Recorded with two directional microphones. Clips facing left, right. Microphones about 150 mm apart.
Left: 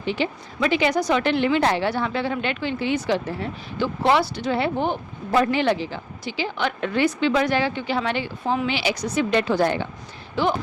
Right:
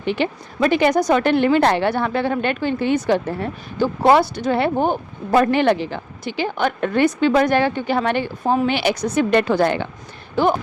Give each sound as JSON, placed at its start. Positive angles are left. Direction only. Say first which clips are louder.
{"t": 0.0, "sound": "a woman's voice", "louder": "right 4 dB", "side_deg": -60}
{"t": 10.4, "sound": "a woman's voice", "louder": "right 5 dB", "side_deg": -45}